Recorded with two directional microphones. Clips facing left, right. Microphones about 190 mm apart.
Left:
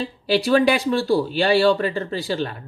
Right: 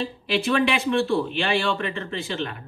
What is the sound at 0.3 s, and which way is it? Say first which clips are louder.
Speech: left 5 dB; 35° left (ahead or behind).